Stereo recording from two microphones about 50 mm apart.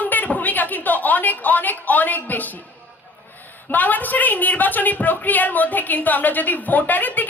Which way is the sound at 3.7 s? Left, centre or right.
Left.